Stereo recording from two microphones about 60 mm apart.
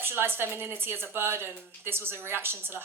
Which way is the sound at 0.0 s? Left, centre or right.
Right.